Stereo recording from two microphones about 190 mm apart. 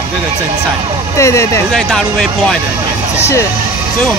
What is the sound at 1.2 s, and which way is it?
Speech, 15° left (ahead or behind).